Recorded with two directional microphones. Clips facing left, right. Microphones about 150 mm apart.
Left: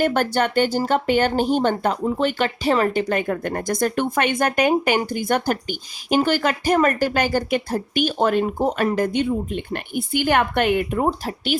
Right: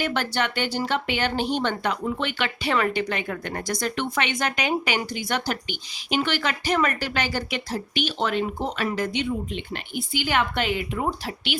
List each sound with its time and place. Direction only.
0.0 s speech: 50° left (ahead or behind)
11.0 s speech: 45° left (ahead or behind)